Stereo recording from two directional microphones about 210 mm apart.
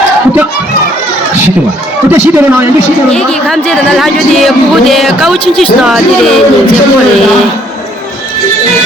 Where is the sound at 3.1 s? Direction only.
5° left (ahead or behind).